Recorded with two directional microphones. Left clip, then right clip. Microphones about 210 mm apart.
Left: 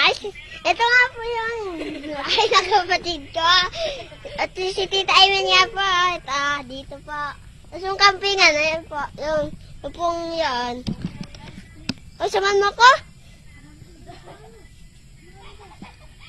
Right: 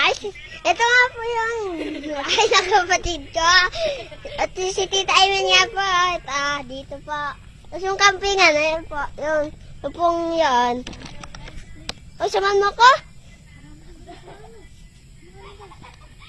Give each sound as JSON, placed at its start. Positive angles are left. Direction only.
{"t": 0.0, "sound": "speech", "side_deg": 0}
{"t": 1.7, "sound": "a child's voice", "side_deg": -30}
{"t": 2.1, "sound": "a child's voice", "side_deg": 0}
{"t": 2.8, "sound": "speech", "side_deg": -5}
{"t": 3.4, "sound": "a child's voice", "side_deg": -15}
{"t": 8.3, "sound": "a child's voice", "side_deg": -20}
{"t": 12.1, "sound": "speech", "side_deg": 0}